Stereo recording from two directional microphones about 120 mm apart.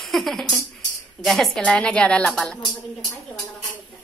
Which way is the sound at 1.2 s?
Centre (ahead or behind).